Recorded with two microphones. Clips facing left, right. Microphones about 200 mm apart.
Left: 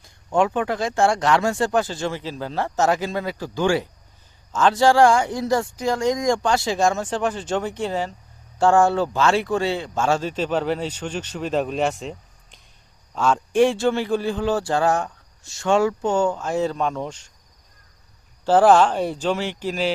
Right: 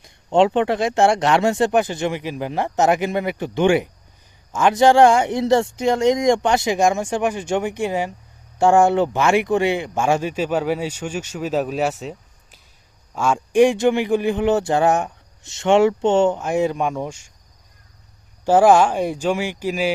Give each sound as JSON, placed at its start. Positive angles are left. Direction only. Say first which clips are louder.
{"t": 0.0, "sound": "speech", "louder": "right 4 dB", "side_deg": -25}
{"t": 18.4, "sound": "speech", "louder": "right 1 dB", "side_deg": -10}